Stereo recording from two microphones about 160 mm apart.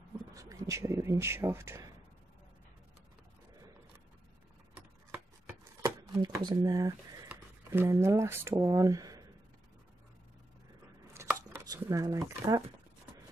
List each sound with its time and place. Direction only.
0.3 s speech: 20° right (ahead or behind)
5.8 s speech: 20° right (ahead or behind)
11.2 s chopping: 20° right (ahead or behind)
11.6 s speech: 20° right (ahead or behind)